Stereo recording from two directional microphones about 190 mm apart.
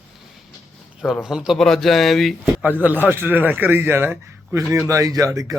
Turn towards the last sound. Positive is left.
turn(degrees=-15)  # may be behind; listen again after turning